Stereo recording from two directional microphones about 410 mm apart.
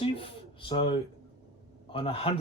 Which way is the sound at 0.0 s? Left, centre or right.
Centre.